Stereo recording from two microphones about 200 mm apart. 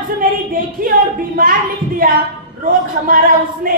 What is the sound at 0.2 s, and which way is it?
Speech, 45° right (ahead or behind).